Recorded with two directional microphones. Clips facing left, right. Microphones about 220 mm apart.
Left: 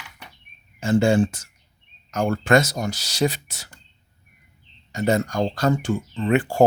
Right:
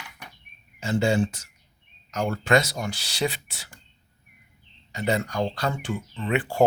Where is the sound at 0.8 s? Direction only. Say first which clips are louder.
Left 5 dB; 50° left (ahead or behind).